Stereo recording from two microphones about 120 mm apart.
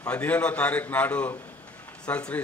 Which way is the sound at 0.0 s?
10° left (ahead or behind).